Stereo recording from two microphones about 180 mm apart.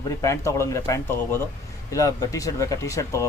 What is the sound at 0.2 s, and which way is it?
Speech, 15° left (ahead or behind).